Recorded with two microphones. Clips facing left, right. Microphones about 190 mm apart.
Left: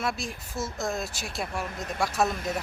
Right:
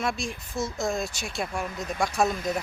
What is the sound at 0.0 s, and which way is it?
Speech, 5° left (ahead or behind).